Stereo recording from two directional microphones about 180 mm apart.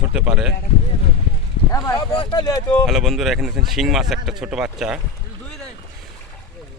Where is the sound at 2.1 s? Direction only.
25° left (ahead or behind).